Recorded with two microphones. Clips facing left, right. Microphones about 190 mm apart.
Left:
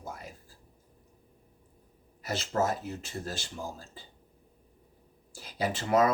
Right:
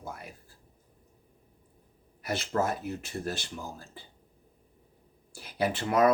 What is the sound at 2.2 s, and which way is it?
Speech, 60° right (ahead or behind).